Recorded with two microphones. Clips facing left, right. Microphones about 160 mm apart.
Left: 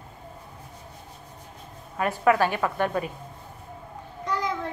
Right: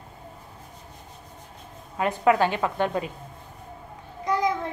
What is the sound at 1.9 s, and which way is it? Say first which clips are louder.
A woman's voice: right 1 dB; 20° right (ahead or behind).